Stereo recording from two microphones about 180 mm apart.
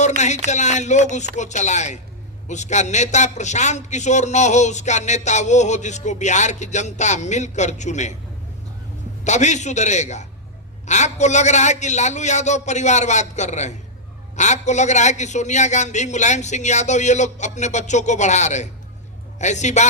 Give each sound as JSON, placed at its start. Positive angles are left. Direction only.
{"t": 0.2, "sound": "a man's voice", "side_deg": 40}
{"t": 9.2, "sound": "a man's voice", "side_deg": 40}